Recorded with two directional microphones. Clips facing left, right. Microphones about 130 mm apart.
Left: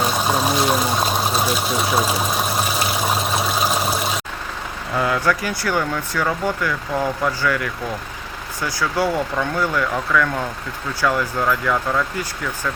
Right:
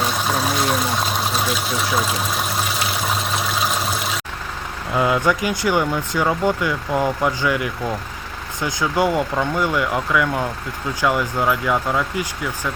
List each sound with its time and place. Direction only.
0.0 s pour: 5° left (ahead or behind)
1.7 s speech: 5° left (ahead or behind)
3.1 s a sound: 5° left (ahead or behind)
4.9 s speech: 20° right (ahead or behind)